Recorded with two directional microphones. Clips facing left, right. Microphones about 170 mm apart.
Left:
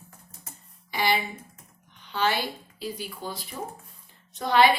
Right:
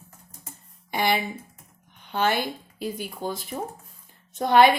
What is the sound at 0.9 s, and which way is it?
Speech, 55° right (ahead or behind).